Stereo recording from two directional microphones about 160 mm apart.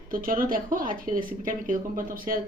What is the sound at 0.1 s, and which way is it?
Speech, 60° right (ahead or behind).